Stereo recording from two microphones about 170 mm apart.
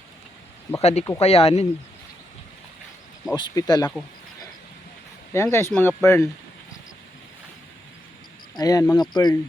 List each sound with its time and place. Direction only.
0.8 s speech: 40° left (ahead or behind)
3.3 s speech: 25° left (ahead or behind)
5.3 s speech: 15° left (ahead or behind)
8.5 s speech: 20° left (ahead or behind)